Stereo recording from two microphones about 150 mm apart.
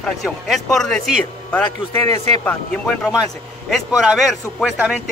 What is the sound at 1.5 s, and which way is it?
A man's voice, 15° left (ahead or behind).